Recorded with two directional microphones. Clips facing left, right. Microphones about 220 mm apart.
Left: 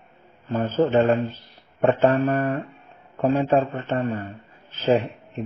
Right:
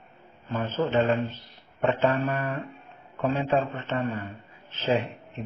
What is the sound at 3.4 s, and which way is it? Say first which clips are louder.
Speech: left 5 dB; 55° left (ahead or behind).